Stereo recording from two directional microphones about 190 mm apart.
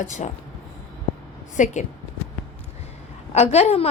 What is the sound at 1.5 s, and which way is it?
Speech, 40° left (ahead or behind).